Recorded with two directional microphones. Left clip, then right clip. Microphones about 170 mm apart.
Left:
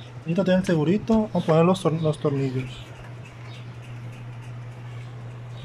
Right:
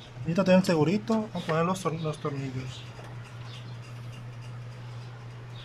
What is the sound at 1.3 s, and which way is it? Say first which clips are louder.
Speech: left 11 dB; 25° left (ahead or behind).